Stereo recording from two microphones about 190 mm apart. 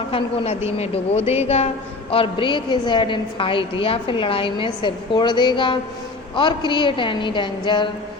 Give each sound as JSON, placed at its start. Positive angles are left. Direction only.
{"t": 0.1, "sound": "a woman's voice", "side_deg": 30}